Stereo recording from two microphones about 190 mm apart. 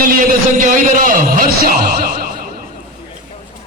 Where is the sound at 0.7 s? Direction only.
45° right (ahead or behind).